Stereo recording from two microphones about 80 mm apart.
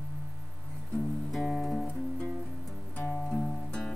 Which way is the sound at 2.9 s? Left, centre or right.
Left.